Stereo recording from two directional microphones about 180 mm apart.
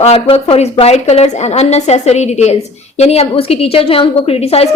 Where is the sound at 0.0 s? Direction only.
30° left (ahead or behind).